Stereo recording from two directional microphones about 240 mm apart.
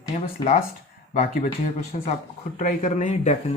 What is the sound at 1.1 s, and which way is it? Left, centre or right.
Speech, left.